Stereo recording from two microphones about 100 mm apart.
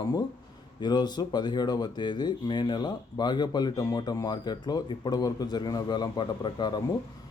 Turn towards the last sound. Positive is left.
turn(degrees=45)  # may be behind; listen again after turning